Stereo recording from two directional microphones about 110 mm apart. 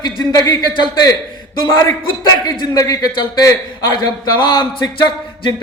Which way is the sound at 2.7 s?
35° left (ahead or behind).